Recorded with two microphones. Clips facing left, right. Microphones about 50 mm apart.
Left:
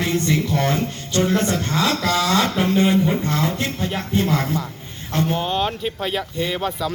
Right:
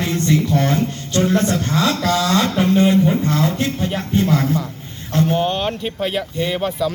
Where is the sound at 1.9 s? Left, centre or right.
Left.